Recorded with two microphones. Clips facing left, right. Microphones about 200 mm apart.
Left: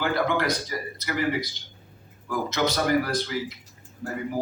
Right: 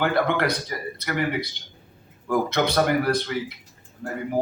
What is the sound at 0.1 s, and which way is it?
Speech, 60° right (ahead or behind).